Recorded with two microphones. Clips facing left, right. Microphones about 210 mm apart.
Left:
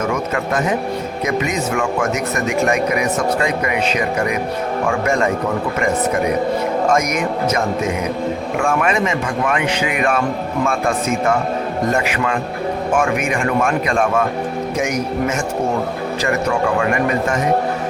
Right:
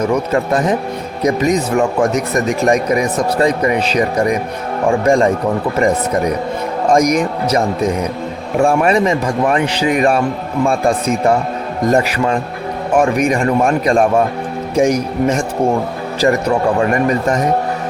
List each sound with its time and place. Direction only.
0.0 s speech: 35° right (ahead or behind)
6.9 s speech: 35° right (ahead or behind)